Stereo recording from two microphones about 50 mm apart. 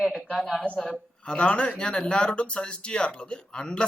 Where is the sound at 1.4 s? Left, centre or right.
Left.